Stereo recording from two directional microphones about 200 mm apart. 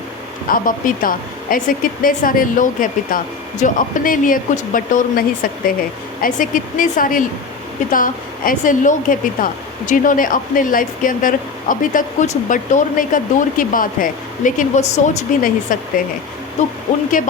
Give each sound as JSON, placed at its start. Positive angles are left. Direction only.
{"t": 0.4, "sound": "a woman's voice", "side_deg": 45}